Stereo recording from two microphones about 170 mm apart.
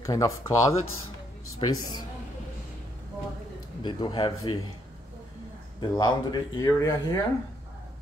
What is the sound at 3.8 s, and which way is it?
Speech, 25° left (ahead or behind).